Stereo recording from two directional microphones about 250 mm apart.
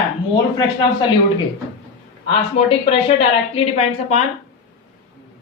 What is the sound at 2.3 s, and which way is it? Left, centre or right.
A man's voice, left.